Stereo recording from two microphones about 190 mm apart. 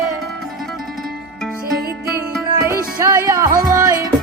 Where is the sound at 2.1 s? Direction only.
15° right (ahead or behind).